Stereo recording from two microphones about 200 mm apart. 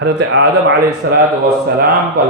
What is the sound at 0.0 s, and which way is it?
A man's voice, 60° right (ahead or behind).